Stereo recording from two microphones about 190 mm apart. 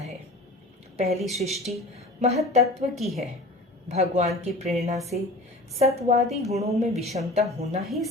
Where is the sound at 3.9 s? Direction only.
35° right (ahead or behind).